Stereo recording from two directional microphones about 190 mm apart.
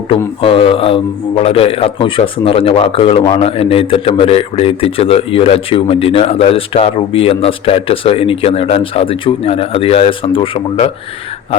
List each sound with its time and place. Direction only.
0.4 s a man's voice: 30° left (ahead or behind)